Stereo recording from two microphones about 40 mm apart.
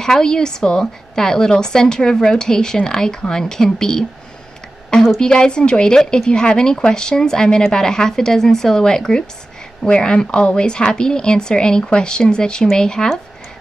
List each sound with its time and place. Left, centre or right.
0.0 s a woman's voice: centre
5.2 s a woman's voice: left